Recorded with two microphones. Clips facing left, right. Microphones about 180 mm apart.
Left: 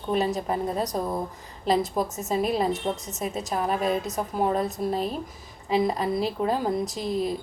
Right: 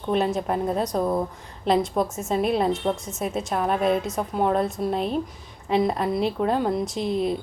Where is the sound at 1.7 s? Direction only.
Centre (ahead or behind).